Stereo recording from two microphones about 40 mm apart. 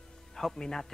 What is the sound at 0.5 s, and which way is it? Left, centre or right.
Speech, centre.